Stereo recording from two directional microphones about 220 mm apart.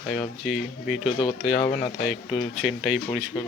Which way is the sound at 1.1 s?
25° left (ahead or behind).